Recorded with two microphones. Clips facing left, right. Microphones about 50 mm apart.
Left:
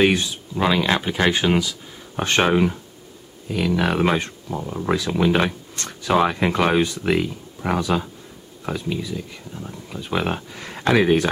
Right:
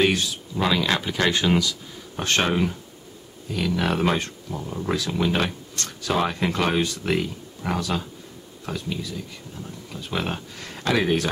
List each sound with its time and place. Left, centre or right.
0.0 s speech: centre